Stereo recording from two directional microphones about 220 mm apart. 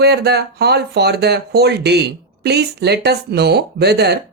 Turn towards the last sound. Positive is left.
turn(degrees=-50)  # may be behind; listen again after turning